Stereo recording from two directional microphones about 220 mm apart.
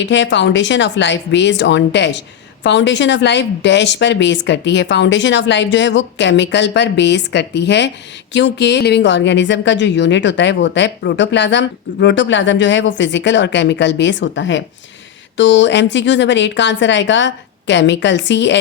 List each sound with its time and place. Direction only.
0.0 s a woman's voice: 55° left (ahead or behind)